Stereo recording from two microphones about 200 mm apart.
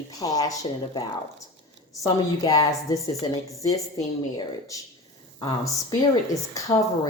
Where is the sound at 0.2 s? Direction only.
20° left (ahead or behind).